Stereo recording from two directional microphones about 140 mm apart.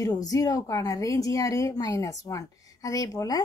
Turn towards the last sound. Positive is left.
turn(degrees=25)  # may be behind; listen again after turning